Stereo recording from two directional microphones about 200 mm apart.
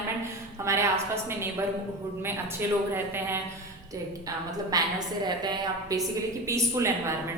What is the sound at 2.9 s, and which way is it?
Speech, 10° right (ahead or behind).